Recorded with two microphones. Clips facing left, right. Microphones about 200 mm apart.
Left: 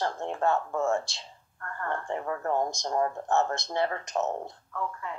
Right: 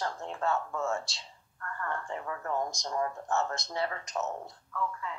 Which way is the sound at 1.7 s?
35° left (ahead or behind).